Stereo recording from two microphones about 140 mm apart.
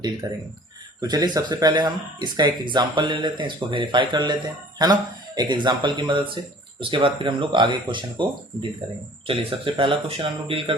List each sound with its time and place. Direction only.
0.2 s speech: 25° right (ahead or behind); by 10.8 s 40° right (ahead or behind)